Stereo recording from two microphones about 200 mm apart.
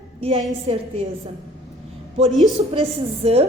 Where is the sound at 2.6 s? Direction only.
30° right (ahead or behind).